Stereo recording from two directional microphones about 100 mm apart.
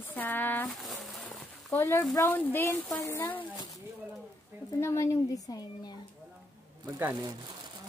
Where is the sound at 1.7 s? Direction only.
25° left (ahead or behind).